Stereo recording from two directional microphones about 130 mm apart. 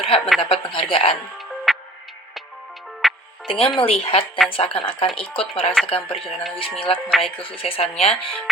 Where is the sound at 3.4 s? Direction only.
40° left (ahead or behind).